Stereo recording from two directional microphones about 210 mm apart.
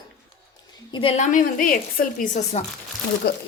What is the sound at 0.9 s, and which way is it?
A woman's voice, 30° left (ahead or behind).